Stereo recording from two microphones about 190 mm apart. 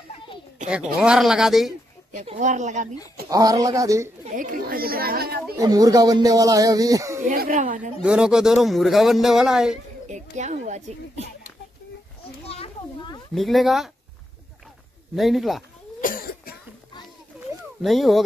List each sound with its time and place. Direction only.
0.7 s a man's voice: 5° right (ahead or behind)
2.1 s speech: 40° right (ahead or behind)
3.3 s speech: 20° right (ahead or behind)
4.4 s speech: 50° right (ahead or behind)
5.6 s speech: 20° right (ahead or behind)
7.2 s speech: 40° right (ahead or behind)
8.0 s a man's voice: 5° right (ahead or behind)
10.0 s a child's voice: 40° right (ahead or behind)
12.4 s children playing: 30° left (ahead or behind)
13.3 s a man's voice: centre (ahead or behind)
15.1 s a man's voice: centre (ahead or behind)
16.0 s cough: 50° left (ahead or behind)
17.8 s a man's voice: centre (ahead or behind)